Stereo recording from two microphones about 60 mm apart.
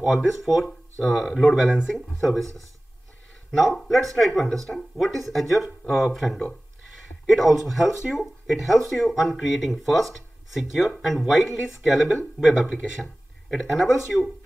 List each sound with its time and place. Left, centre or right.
0.0 s speech: centre